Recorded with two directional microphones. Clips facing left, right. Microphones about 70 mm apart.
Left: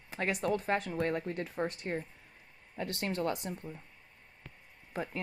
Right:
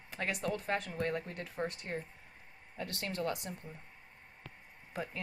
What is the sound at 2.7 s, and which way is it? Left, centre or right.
Speech, left.